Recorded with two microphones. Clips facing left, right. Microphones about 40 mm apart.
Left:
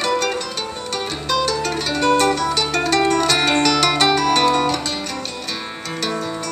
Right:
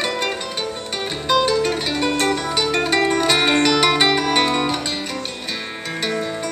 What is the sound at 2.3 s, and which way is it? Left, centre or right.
Music, right.